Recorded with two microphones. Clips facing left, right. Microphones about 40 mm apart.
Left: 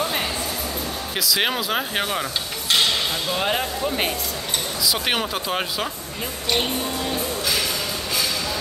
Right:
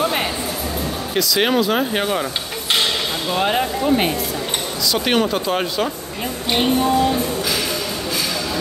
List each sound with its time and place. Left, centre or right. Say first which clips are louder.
0.0 s music: right 4 dB; centre
1.1 s speech: right 5 dB; centre
3.3 s speech: right 7 dB; centre